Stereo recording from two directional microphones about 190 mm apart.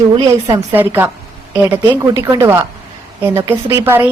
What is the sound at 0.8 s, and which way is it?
A woman's voice, 10° right (ahead or behind).